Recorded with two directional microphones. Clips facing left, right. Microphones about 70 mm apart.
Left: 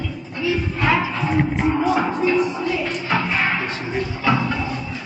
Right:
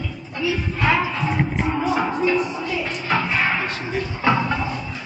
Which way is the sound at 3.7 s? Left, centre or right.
Centre.